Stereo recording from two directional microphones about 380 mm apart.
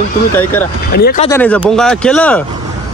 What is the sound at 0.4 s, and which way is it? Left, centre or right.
Speech, centre.